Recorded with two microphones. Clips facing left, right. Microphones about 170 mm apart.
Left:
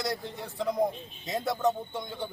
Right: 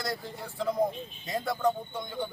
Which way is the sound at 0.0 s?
20° left (ahead or behind).